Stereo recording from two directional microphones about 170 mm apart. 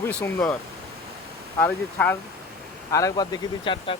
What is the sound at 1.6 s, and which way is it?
Speech, 10° left (ahead or behind).